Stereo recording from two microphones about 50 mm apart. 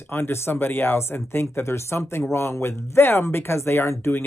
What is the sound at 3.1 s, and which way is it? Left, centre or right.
Speech, left.